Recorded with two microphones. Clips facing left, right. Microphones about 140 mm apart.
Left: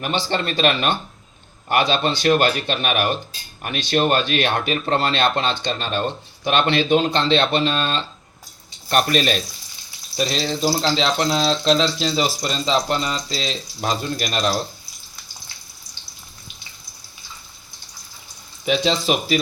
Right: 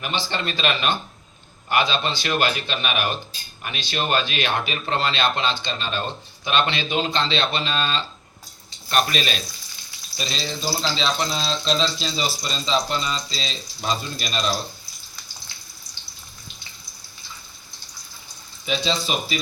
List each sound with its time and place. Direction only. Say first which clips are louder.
0.0 s speech: left 4 dB; 50° left (ahead or behind)
10.2 s speech: left 8 dB; 65° left (ahead or behind)
18.6 s speech: left 5 dB; 70° left (ahead or behind)